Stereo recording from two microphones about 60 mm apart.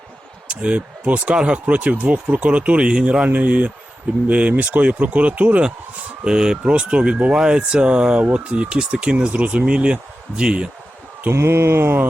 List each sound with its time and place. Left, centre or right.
0.4 s speech: centre
6.2 s speech: centre
11.3 s mantra: right